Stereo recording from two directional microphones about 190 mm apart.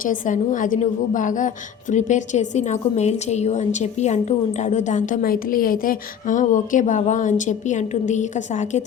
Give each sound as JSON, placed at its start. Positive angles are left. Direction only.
{"t": 0.0, "sound": "a woman's voice", "side_deg": 45}